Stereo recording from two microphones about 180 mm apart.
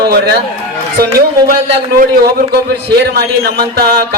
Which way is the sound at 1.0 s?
60° right (ahead or behind).